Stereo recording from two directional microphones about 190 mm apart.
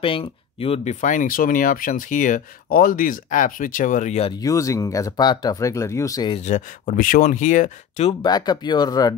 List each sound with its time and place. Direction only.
0.0 s speech: 30° left (ahead or behind)
1.0 s speech: 45° left (ahead or behind)
4.3 s speech: 20° left (ahead or behind)
6.3 s speech: 40° left (ahead or behind); by 9.1 s 20° left (ahead or behind)